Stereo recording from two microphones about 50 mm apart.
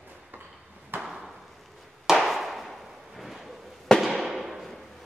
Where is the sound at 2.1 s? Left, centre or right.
Centre.